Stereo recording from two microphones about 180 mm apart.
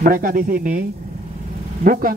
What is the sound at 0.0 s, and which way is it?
Speech, 50° right (ahead or behind).